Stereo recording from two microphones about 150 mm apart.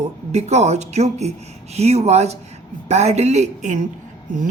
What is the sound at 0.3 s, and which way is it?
A woman's voice, 50° right (ahead or behind).